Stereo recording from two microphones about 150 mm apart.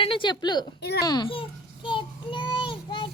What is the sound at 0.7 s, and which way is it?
Speech, 90° left.